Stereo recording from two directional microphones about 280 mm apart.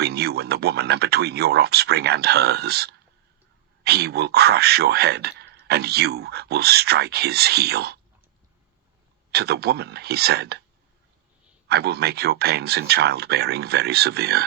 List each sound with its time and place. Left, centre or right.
0.0 s speech: right
9.3 s speech: right
11.7 s speech: right